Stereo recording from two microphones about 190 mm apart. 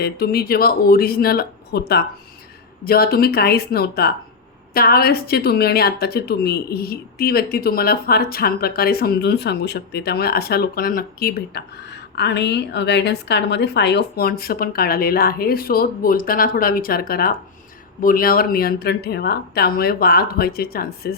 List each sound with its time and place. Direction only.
0.0 s a woman's voice: 55° left (ahead or behind)